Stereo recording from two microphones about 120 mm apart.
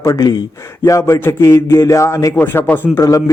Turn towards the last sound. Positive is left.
turn(degrees=25)  # may be behind; listen again after turning